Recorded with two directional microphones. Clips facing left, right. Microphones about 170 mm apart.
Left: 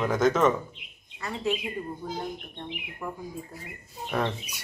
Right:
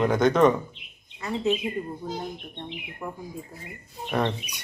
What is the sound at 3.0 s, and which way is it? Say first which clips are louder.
Speech: even; 15° right (ahead or behind).